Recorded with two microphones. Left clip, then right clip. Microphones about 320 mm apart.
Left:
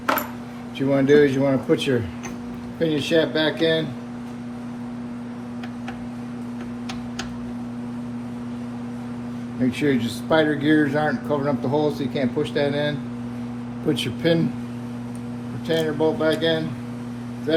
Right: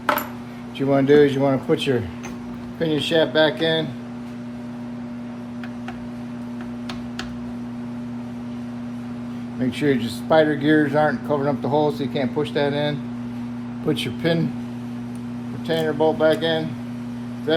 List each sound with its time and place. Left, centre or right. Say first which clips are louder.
0.8 s speech: right 1 dB; right
9.8 s speech: right 3 dB; right
15.6 s speech: right 1 dB; right